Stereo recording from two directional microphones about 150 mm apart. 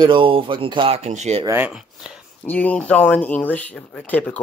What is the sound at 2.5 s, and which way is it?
Speech, 10° left (ahead or behind).